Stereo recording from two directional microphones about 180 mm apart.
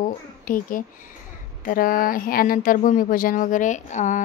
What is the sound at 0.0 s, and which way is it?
A child's voice, 50° left (ahead or behind).